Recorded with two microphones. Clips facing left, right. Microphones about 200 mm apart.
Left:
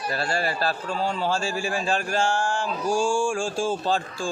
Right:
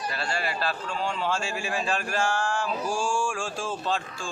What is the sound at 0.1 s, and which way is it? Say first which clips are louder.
A man's voice: left 7 dB; 40° left (ahead or behind).